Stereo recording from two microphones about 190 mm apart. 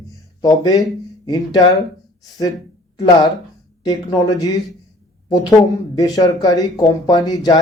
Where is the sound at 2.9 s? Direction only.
20° left (ahead or behind).